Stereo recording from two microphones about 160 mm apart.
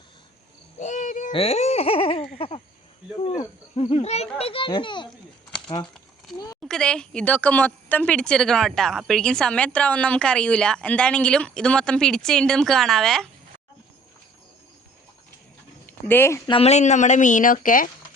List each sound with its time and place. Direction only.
0.8 s insect: 50° left (ahead or behind)
1.3 s speech: 40° left (ahead or behind)
3.8 s speech: 40° left (ahead or behind)
6.6 s speech: 5° left (ahead or behind)
15.9 s speech: 10° left (ahead or behind)
16.5 s speech: 40° left (ahead or behind); by 17.9 s 55° left (ahead or behind)